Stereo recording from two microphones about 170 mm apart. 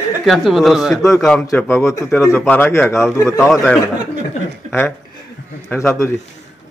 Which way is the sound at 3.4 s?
5° left (ahead or behind).